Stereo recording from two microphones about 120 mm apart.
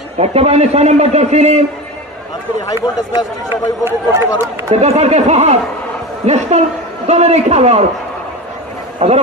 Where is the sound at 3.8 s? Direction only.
20° right (ahead or behind).